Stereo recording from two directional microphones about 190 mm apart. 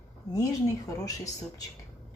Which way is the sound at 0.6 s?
15° left (ahead or behind).